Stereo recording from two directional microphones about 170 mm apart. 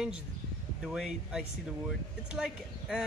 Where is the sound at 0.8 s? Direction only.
5° right (ahead or behind).